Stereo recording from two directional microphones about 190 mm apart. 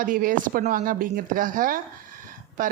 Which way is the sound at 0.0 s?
45° right (ahead or behind).